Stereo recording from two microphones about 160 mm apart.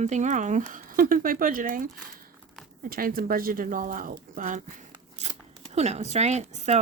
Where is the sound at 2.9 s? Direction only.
65° right (ahead or behind).